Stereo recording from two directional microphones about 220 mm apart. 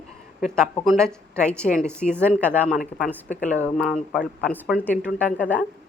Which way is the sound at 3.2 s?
35° left (ahead or behind).